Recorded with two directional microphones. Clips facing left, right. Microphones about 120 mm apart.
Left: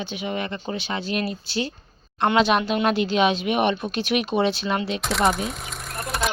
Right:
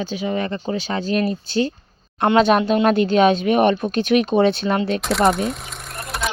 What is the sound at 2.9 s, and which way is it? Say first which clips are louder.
Speech: right 5 dB; 45° right (ahead or behind).